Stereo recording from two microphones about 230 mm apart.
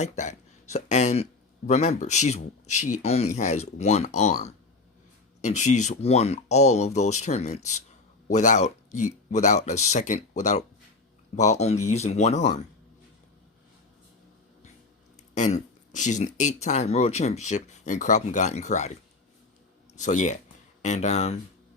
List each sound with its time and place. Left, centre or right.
0.0 s speech: left
15.5 s speech: left
20.0 s speech: left